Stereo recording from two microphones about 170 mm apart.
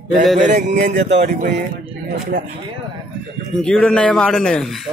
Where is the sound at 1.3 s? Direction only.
65° right (ahead or behind).